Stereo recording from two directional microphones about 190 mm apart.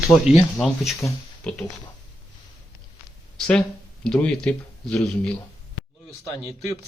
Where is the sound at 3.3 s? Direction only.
5° left (ahead or behind).